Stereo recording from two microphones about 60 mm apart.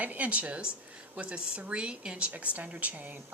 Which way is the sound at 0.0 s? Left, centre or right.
Right.